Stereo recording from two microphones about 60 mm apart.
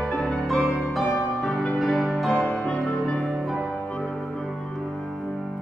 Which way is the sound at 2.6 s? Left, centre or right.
Centre.